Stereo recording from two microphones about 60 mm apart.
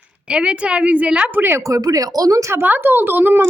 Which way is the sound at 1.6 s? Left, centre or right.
Right.